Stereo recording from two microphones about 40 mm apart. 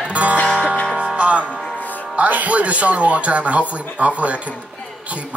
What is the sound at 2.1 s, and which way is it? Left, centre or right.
Speech, right.